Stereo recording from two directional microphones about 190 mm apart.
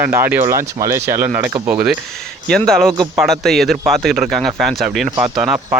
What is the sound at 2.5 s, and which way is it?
A man's voice, 5° left (ahead or behind).